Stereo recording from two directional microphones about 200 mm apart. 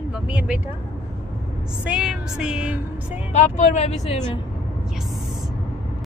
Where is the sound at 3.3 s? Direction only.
35° left (ahead or behind).